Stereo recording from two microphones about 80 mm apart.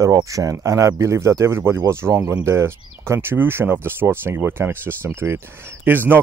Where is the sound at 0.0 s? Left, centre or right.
Right.